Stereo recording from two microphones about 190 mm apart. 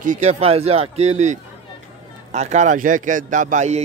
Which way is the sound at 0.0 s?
40° right (ahead or behind).